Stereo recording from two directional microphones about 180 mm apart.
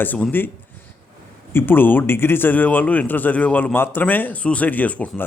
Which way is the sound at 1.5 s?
10° left (ahead or behind).